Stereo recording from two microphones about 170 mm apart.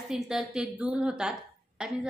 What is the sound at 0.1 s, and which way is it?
A woman's voice, centre (ahead or behind).